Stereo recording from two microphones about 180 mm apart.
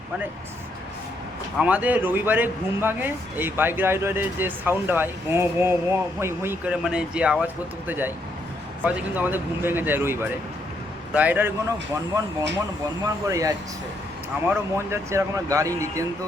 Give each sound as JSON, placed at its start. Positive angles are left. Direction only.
{"t": 1.5, "sound": "speech", "side_deg": -10}
{"t": 13.2, "sound": "speech", "side_deg": -20}